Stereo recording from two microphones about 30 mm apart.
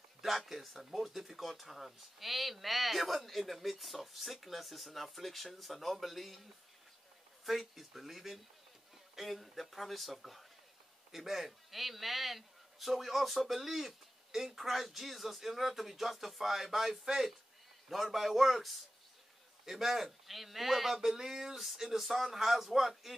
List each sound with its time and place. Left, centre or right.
0.2 s speech: centre
7.4 s a man's voice: centre
18.1 s speech: centre
21.1 s a man's voice: centre